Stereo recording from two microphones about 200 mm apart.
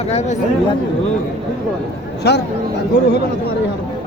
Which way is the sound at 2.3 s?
55° left (ahead or behind).